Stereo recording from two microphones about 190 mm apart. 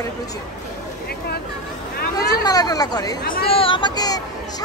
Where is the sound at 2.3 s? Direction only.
20° left (ahead or behind).